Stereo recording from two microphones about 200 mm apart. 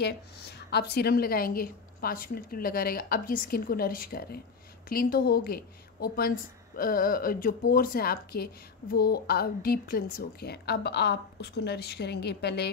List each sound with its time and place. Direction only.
0.0 s a woman's voice: 55° left (ahead or behind)